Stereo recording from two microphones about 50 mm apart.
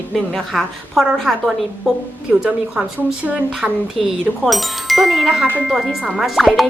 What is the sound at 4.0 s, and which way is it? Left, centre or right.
A woman's voice, centre.